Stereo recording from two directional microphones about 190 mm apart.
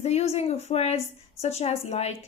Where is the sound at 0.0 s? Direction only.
35° left (ahead or behind).